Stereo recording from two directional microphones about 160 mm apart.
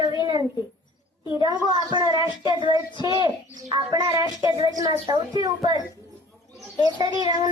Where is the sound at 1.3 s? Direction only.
25° right (ahead or behind).